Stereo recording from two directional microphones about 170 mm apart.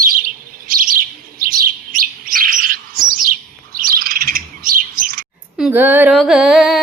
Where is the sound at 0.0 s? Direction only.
55° right (ahead or behind).